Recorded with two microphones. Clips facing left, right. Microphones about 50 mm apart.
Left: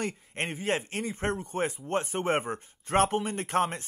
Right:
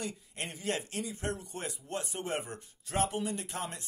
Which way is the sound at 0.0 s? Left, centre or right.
Left.